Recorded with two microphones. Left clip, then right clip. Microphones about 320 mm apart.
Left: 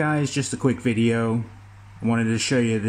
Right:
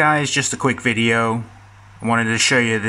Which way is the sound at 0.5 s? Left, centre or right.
Right.